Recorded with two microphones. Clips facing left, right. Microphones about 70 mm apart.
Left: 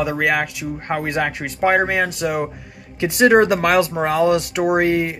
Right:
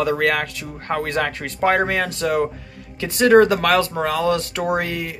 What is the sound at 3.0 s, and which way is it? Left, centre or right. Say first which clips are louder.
Speech: even; left.